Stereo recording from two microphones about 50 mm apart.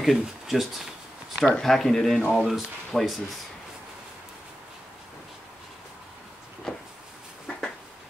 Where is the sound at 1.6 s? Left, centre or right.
Centre.